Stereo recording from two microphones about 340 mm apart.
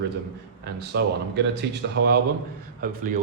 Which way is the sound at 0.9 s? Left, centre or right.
Right.